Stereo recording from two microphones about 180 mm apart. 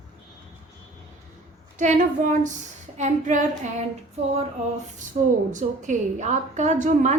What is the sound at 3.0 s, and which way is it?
Female singing, 45° right (ahead or behind).